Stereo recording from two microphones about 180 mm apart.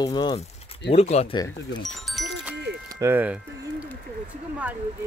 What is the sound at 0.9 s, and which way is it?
Speech, 35° left (ahead or behind).